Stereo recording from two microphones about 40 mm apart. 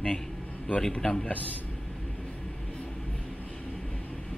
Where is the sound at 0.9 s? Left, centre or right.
Left.